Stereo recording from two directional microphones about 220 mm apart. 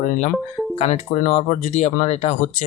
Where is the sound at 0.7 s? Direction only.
30° left (ahead or behind).